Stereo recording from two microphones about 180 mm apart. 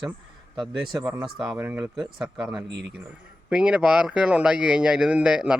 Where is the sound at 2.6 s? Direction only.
80° right.